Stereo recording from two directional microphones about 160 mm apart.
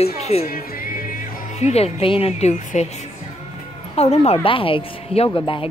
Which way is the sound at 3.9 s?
40° left (ahead or behind).